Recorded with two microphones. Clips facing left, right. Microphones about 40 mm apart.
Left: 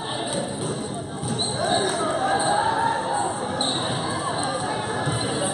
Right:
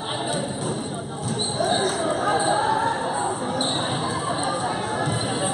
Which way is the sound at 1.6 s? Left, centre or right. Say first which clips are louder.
Even; centre.